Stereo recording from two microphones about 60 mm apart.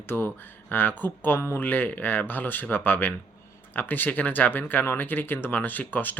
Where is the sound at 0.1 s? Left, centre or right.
Left.